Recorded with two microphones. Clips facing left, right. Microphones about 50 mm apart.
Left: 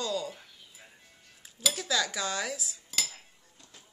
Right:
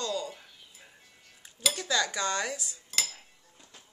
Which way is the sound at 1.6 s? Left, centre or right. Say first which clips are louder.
Right 1 dB; centre.